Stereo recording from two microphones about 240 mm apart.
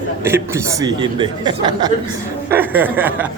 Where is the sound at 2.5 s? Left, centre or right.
Centre.